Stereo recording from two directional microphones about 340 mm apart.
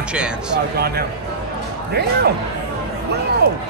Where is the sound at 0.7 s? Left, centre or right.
Right.